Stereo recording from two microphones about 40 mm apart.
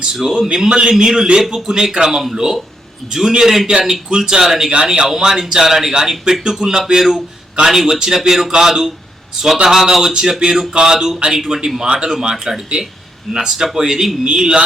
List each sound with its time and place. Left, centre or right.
0.0 s a man's voice: centre
11.9 s a man's voice: right
14.3 s speech: right